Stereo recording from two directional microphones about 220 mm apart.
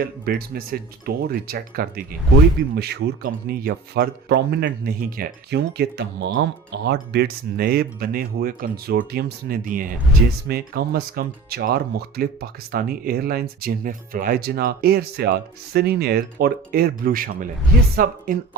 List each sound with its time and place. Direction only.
0.3 s speech: 45° right (ahead or behind)